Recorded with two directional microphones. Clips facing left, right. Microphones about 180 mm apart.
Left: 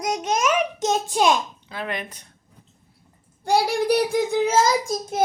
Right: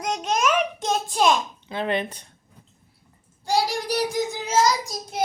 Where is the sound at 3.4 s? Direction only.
55° left (ahead or behind).